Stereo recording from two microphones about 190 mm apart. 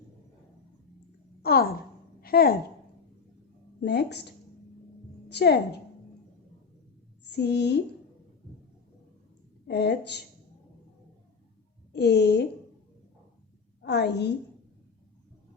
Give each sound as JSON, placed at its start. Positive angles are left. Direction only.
{"t": 1.4, "sound": "a sound", "side_deg": 55}
{"t": 2.2, "sound": "a woman's voice", "side_deg": 55}
{"t": 3.8, "sound": "a woman's voice", "side_deg": 60}
{"t": 7.3, "sound": "a woman's voice", "side_deg": 60}
{"t": 9.6, "sound": "a woman's voice", "side_deg": 60}
{"t": 11.9, "sound": "a woman's voice", "side_deg": 60}
{"t": 13.8, "sound": "a woman's voice", "side_deg": 60}